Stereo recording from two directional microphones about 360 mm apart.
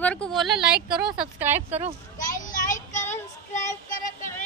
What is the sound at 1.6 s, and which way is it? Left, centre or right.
Speech, centre.